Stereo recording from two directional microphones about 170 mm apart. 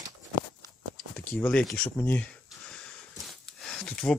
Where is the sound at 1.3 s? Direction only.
10° left (ahead or behind).